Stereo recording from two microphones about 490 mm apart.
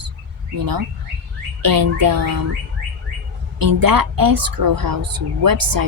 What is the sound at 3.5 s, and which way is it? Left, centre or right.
Speech, right.